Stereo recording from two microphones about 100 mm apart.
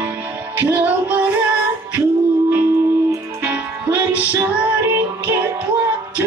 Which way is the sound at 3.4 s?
20° right (ahead or behind).